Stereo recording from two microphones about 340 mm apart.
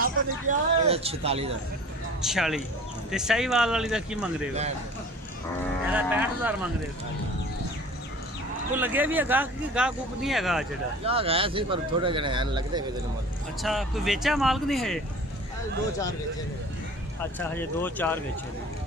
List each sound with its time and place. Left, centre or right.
0.0 s speech: centre
2.2 s speech: centre
5.9 s speech: centre
8.7 s speech: centre
11.1 s speech: centre
13.6 s speech: centre
17.2 s speech: centre